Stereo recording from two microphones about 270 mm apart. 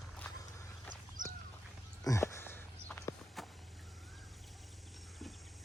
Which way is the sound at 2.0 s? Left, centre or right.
Centre.